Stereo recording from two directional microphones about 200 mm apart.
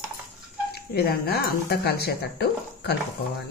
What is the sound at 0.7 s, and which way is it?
Speech, 50° left (ahead or behind).